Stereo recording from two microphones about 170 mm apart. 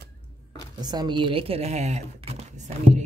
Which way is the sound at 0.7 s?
25° right (ahead or behind).